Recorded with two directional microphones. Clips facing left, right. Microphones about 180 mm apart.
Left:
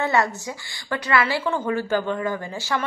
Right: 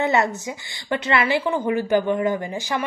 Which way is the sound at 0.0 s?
20° right (ahead or behind).